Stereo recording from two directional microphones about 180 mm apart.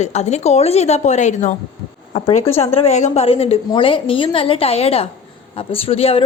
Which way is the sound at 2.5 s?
35° left (ahead or behind).